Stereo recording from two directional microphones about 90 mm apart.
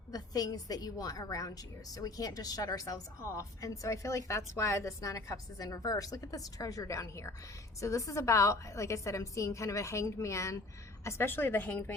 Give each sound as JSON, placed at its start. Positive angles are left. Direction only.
{"t": 0.1, "sound": "a woman's voice", "side_deg": 45}